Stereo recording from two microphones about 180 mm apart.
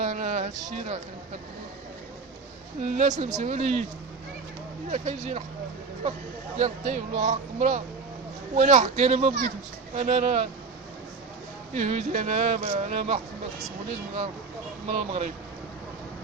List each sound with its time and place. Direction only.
0.0 s a sound: 40° right (ahead or behind)
2.8 s speech: 40° right (ahead or behind)
4.9 s speech: 35° right (ahead or behind)
6.6 s speech: 40° right (ahead or behind)
11.7 s speech: 40° right (ahead or behind)
14.8 s speech: 35° right (ahead or behind)